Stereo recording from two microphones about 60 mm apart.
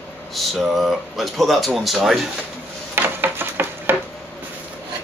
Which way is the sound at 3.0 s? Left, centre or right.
Right.